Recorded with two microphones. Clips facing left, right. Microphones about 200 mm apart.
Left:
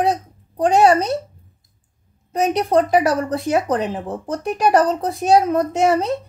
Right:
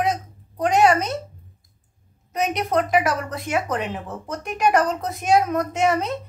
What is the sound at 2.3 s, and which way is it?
A woman's voice, 30° left (ahead or behind).